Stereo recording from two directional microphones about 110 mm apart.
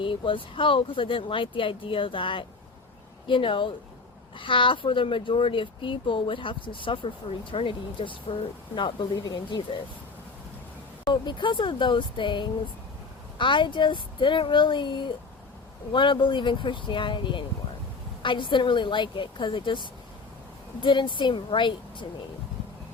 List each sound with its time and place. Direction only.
0.0 s speech: 50° left (ahead or behind)
11.0 s speech: 45° left (ahead or behind)
20.8 s speech: 50° left (ahead or behind)